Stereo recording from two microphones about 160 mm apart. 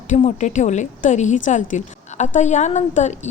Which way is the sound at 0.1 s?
50° left (ahead or behind).